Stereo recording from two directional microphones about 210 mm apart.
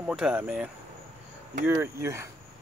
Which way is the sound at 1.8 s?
15° right (ahead or behind).